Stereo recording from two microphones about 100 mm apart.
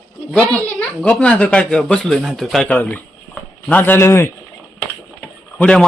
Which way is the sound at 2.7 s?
15° left (ahead or behind).